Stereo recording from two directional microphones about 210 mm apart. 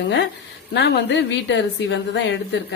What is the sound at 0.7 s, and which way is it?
A woman's voice, 55° left (ahead or behind).